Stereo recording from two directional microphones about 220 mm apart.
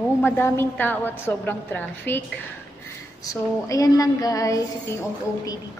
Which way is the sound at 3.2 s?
15° left (ahead or behind).